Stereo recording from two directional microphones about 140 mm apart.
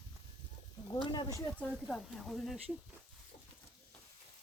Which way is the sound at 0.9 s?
30° left (ahead or behind).